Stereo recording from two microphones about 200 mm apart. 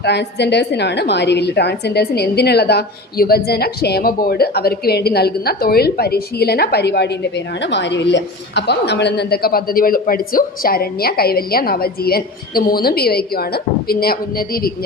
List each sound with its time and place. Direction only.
0.0 s a woman's voice: 55° left (ahead or behind)